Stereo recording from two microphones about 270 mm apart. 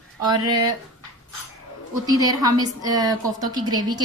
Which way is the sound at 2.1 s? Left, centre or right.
Centre.